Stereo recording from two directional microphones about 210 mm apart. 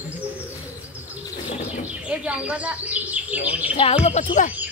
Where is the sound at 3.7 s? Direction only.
30° left (ahead or behind).